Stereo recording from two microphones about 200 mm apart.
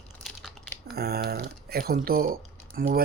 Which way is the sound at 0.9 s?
50° right (ahead or behind).